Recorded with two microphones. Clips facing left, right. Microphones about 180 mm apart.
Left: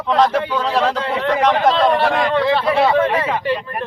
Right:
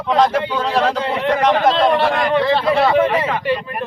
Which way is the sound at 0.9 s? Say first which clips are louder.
Right 1 dB; 15° right (ahead or behind).